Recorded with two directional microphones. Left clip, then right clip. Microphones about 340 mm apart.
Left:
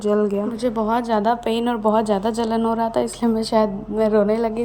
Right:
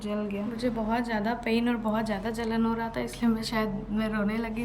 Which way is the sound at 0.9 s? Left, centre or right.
Centre.